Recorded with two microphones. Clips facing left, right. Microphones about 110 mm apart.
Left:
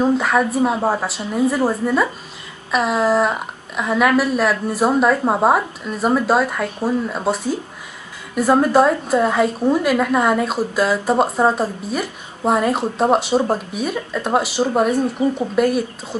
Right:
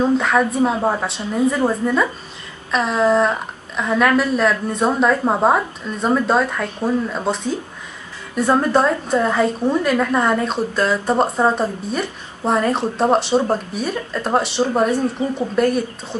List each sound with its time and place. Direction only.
0.2 s a woman's voice: 5° left (ahead or behind)
8.4 s a woman's voice: 5° left (ahead or behind)
15.2 s speech: 25° left (ahead or behind)
15.5 s a woman's voice: 5° left (ahead or behind)